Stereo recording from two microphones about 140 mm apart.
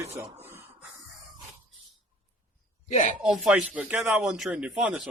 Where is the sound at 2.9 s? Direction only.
60° left (ahead or behind).